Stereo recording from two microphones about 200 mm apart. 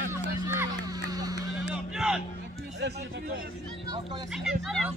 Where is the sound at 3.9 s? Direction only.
25° right (ahead or behind).